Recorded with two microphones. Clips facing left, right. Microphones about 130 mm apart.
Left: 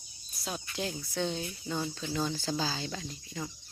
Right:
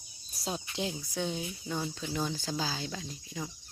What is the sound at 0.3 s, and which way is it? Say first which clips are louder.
Cricket: right 2 dB; 35° right (ahead or behind).